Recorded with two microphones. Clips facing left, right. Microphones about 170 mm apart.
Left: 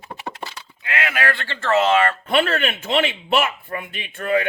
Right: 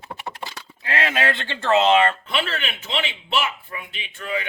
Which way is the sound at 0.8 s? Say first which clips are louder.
Right 1 dB; 30° right (ahead or behind).